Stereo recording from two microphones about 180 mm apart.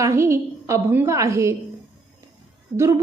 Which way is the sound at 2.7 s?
20° right (ahead or behind).